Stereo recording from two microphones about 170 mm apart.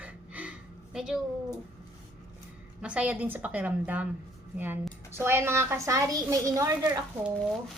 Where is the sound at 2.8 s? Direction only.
5° right (ahead or behind).